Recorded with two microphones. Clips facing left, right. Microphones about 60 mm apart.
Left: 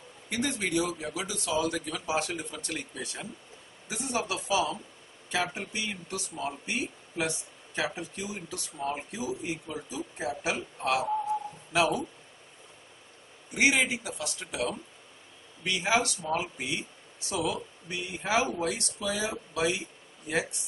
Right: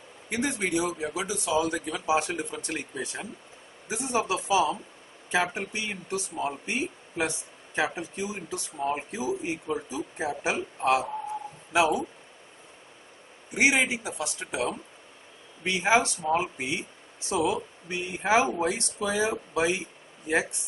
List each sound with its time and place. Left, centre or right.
0.3 s speech: right
13.5 s speech: centre